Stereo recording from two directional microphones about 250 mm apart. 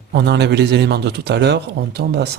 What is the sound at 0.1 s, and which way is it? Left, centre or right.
A man's voice, right.